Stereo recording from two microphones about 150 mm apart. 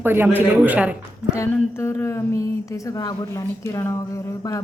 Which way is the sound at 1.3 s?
20° left (ahead or behind).